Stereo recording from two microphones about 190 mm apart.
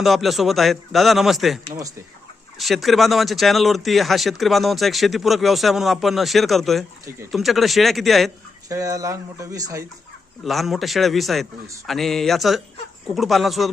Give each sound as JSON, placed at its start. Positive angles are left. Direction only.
{"t": 0.0, "sound": "speech", "side_deg": 0}
{"t": 2.6, "sound": "speech", "side_deg": 0}
{"t": 8.7, "sound": "speech", "side_deg": -15}
{"t": 10.4, "sound": "speech", "side_deg": 0}